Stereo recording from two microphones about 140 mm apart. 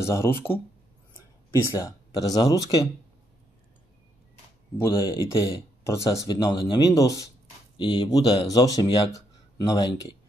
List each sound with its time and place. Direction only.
0.0 s speech: 20° left (ahead or behind)
4.8 s speech: 20° left (ahead or behind)